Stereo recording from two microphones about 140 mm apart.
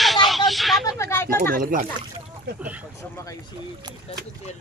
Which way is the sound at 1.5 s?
90° right.